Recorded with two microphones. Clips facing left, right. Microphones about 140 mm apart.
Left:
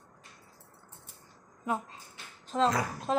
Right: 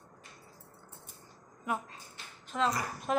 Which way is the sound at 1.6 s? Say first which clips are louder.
Left 2 dB; 25° left (ahead or behind).